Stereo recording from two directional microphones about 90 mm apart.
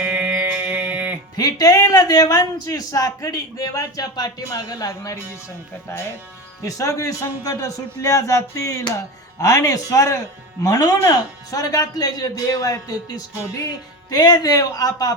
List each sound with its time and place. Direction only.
0.0 s music: 15° right (ahead or behind)
1.4 s a man's voice: 45° left (ahead or behind)
6.6 s a man's voice: 40° left (ahead or behind)